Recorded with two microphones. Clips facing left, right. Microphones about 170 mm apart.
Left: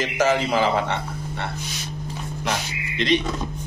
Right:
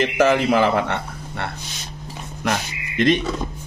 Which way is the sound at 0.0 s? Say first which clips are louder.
Right 4 dB; 55° right (ahead or behind).